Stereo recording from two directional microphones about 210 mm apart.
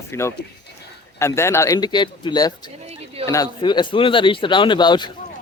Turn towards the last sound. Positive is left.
turn(degrees=20)  # may be behind; listen again after turning